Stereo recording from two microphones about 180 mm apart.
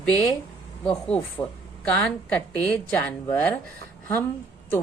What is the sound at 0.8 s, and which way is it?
A woman's voice, 5° left (ahead or behind).